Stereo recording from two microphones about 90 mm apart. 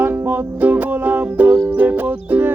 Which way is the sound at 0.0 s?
20° right (ahead or behind).